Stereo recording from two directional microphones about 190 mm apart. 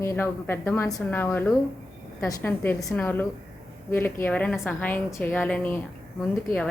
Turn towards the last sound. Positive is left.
turn(degrees=10)  # may be behind; listen again after turning